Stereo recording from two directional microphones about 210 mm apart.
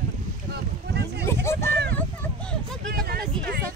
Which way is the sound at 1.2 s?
15° left (ahead or behind).